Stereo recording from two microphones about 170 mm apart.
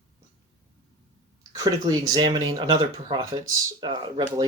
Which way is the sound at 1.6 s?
20° right (ahead or behind).